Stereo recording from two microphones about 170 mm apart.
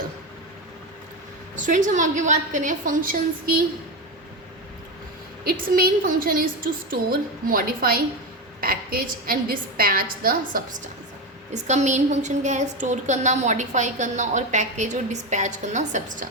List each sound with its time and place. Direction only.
1.5 s a woman's voice: 50° right (ahead or behind)
5.5 s a woman's voice: 60° right (ahead or behind)
11.5 s a woman's voice: 45° right (ahead or behind)